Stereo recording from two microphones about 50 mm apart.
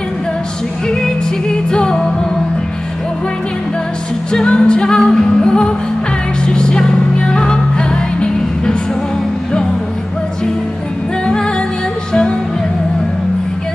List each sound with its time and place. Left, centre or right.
0.8 s music: centre
4.3 s music: centre